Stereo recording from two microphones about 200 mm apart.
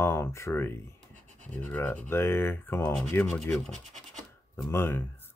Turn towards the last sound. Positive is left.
turn(degrees=10)  # may be behind; listen again after turning